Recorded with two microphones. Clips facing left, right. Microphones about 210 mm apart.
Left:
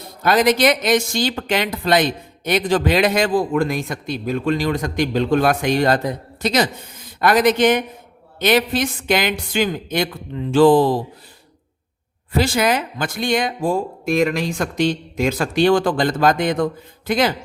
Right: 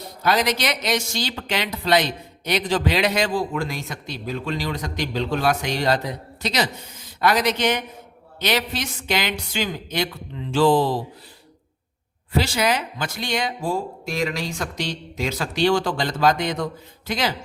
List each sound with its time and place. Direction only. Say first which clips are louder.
0.2 s speech: left 6 dB; 50° left (ahead or behind)
12.4 s speech: left 4 dB; 50° left (ahead or behind)